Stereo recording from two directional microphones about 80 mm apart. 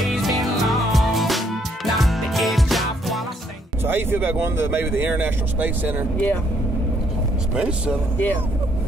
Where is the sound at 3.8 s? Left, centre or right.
Right.